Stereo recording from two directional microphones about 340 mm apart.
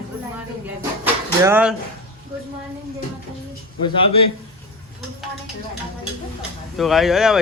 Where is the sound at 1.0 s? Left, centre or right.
Centre.